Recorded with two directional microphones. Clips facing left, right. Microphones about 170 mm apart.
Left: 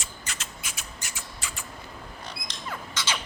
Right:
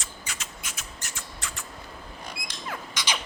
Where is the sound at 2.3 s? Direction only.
10° right (ahead or behind).